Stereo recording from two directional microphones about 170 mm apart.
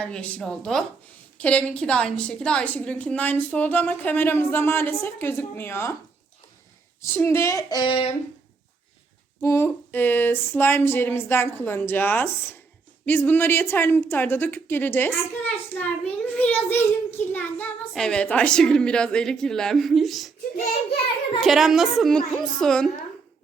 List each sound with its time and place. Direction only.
0.0 s a woman's voice: 5° left (ahead or behind)
7.0 s a woman's voice: 15° left (ahead or behind); by 8.1 s 30° left (ahead or behind)
9.4 s a woman's voice: 15° left (ahead or behind)
21.4 s a woman's voice: centre (ahead or behind)